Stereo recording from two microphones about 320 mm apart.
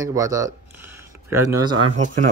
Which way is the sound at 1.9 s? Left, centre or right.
Right.